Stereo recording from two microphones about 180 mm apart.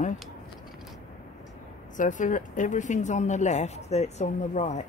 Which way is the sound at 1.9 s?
45° left (ahead or behind).